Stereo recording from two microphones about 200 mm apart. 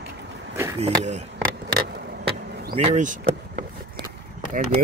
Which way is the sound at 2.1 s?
55° right (ahead or behind).